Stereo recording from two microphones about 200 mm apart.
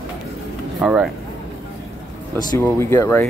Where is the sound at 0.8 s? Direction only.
5° right (ahead or behind).